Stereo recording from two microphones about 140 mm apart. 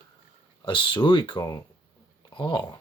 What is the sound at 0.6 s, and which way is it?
Speech, 35° left (ahead or behind).